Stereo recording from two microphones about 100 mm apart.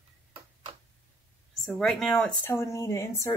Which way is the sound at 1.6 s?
Centre (ahead or behind).